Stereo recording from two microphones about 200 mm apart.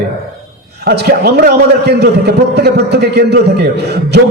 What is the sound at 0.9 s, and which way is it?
A man's voice, 50° right (ahead or behind).